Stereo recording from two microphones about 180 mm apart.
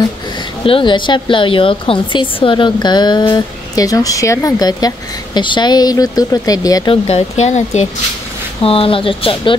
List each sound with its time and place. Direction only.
0.7 s a woman's voice: 30° left (ahead or behind)
7.1 s a woman's voice: 35° left (ahead or behind)